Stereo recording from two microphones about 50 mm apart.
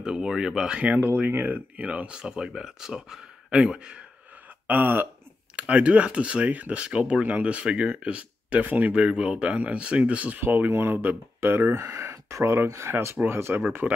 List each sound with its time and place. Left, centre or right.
0.0 s speech: centre
0.7 s speech: right
1.8 s speech: right
4.6 s speech: right
5.6 s speech: right
10.7 s speech: right
11.7 s speech: right
13.7 s speech: right